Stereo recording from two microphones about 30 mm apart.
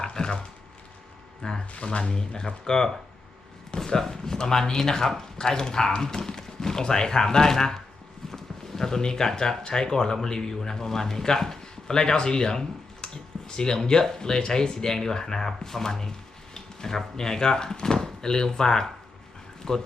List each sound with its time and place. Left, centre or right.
0.0 s a sound: left
1.4 s speech: left
1.8 s speech: left
2.1 s speech: left
11.6 s speech: left
16.6 s a sound: centre
17.2 s speech: centre